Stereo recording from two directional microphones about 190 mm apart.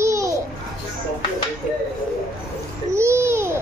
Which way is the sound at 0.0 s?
15° right (ahead or behind).